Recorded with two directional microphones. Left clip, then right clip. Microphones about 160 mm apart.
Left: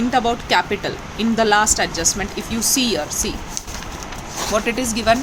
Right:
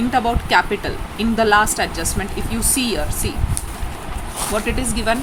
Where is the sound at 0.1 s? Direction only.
10° left (ahead or behind).